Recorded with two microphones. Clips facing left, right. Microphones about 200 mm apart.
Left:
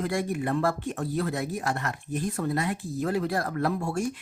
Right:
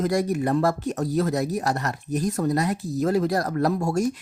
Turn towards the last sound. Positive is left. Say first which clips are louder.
# right 5 dB
turn(degrees=-40)  # may be behind; listen again after turning